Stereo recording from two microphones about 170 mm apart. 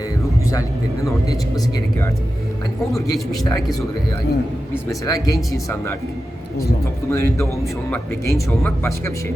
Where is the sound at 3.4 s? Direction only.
20° left (ahead or behind).